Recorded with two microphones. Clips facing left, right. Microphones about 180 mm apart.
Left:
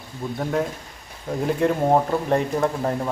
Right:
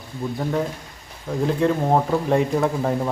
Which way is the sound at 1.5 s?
5° left (ahead or behind).